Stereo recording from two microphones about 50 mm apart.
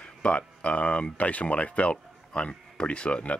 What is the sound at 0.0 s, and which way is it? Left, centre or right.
Speech, left.